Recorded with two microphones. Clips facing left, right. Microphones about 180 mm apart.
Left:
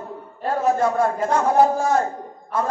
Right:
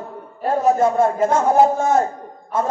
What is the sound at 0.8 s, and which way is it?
A man's voice, 25° right (ahead or behind).